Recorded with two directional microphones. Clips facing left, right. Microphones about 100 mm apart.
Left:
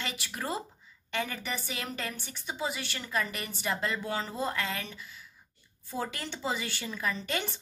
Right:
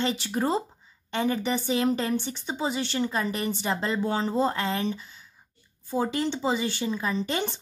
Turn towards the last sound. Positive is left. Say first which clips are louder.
# right 6 dB
turn(degrees=-25)  # may be behind; listen again after turning